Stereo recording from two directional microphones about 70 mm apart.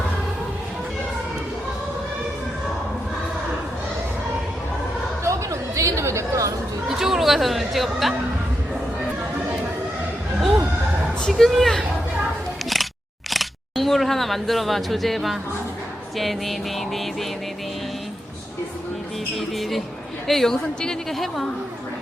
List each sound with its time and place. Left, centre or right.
5.2 s chatter: right
6.8 s speech: centre
11.3 s a woman's voice: centre
13.3 s a woman's voice: centre
19.4 s a woman's voice: centre